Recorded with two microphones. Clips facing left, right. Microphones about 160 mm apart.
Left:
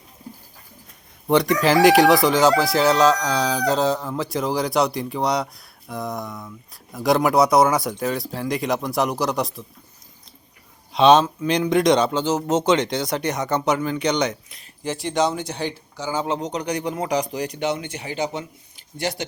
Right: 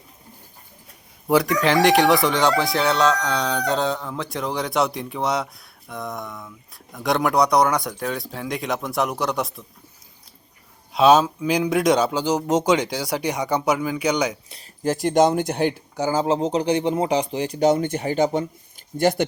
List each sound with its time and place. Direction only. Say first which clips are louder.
1.3 s speech: left 1 dB; 5° right (ahead or behind)
10.9 s speech: left 1 dB; 5° right (ahead or behind)
14.5 s speech: right 5 dB; 40° right (ahead or behind)
16.1 s speech: right 4 dB; 30° right (ahead or behind)
17.7 s speech: right 7 dB; 50° right (ahead or behind)